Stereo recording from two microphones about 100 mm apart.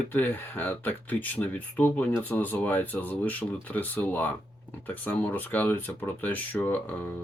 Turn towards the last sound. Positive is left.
turn(degrees=15)  # may be behind; listen again after turning